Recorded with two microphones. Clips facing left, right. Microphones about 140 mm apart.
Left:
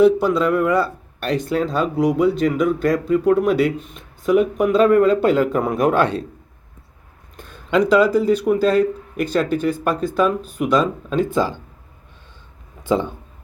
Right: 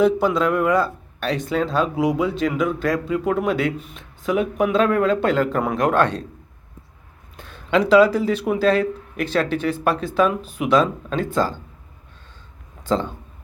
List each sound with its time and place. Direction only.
0.0 s speech: centre (ahead or behind)
7.3 s speech: centre (ahead or behind)